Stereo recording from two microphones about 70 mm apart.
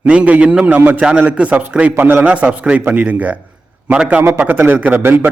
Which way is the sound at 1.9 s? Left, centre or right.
Right.